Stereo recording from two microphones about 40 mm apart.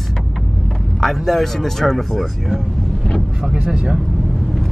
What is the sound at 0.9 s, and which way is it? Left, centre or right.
A man's voice, centre.